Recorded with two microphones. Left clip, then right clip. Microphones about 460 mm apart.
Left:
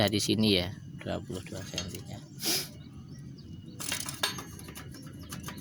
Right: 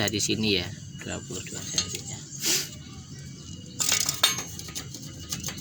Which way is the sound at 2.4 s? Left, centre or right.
Left.